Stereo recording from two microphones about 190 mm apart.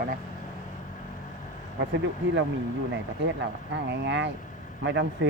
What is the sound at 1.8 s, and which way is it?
Speech, 75° right (ahead or behind).